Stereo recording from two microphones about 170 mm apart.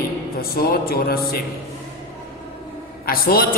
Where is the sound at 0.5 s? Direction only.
65° left (ahead or behind).